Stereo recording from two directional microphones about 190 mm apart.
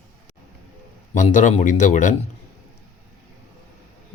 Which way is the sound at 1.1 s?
40° left (ahead or behind).